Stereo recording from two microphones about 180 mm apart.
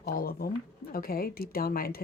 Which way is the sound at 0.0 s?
55° left (ahead or behind).